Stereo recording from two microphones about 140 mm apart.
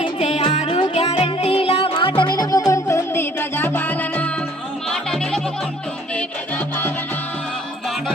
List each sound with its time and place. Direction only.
0.0 s music: 50° left (ahead or behind); by 5.4 s 5° left (ahead or behind)